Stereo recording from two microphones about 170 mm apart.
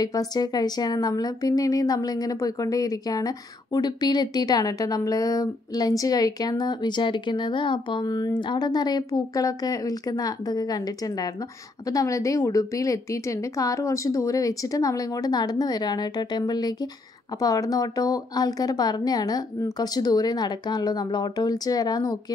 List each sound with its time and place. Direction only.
0.0 s a woman's voice: 20° left (ahead or behind)